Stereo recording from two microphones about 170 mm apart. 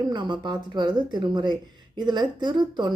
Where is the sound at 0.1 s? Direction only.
25° right (ahead or behind).